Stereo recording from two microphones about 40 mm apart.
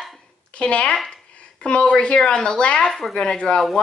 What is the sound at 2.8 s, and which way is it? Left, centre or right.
Speech, centre.